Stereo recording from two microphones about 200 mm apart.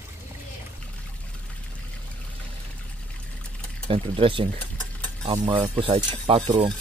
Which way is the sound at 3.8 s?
25° right (ahead or behind).